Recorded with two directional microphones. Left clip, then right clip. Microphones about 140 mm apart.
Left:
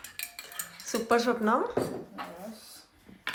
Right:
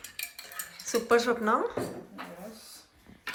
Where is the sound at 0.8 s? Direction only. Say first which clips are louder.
Right 1 dB; 15° left (ahead or behind).